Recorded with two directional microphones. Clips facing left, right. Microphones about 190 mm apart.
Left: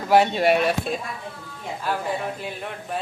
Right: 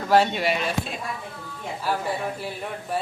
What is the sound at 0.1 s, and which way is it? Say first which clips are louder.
Speech: left 2 dB; 15° left (ahead or behind).